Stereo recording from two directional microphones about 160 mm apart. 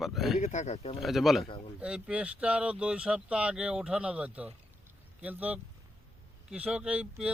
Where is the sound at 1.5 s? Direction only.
35° left (ahead or behind).